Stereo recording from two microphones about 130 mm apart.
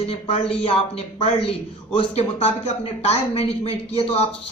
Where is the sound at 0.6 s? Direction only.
45° left (ahead or behind).